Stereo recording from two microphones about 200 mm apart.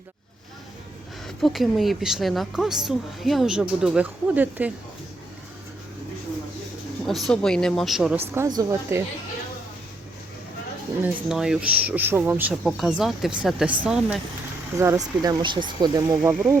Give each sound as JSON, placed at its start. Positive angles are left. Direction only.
{"t": 1.4, "sound": "a woman's voice", "side_deg": 0}
{"t": 7.1, "sound": "a woman's voice", "side_deg": 0}
{"t": 8.3, "sound": "speech", "side_deg": -15}
{"t": 11.0, "sound": "a woman's voice", "side_deg": -5}
{"t": 14.8, "sound": "speech", "side_deg": -15}